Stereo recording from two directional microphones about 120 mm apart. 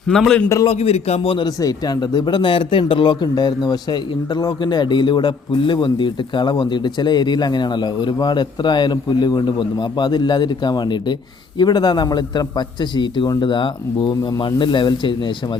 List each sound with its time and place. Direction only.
0.1 s a man's voice: 5° left (ahead or behind)
0.7 s a man's voice: 60° left (ahead or behind)
1.5 s speech: 35° left (ahead or behind)